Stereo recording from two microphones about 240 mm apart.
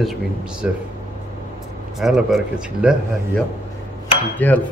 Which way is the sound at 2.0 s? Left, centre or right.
Centre.